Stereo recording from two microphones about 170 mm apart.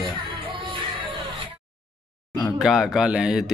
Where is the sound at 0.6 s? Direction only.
30° right (ahead or behind).